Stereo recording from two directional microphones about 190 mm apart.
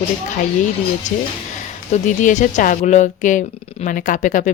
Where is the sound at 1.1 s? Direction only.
40° left (ahead or behind).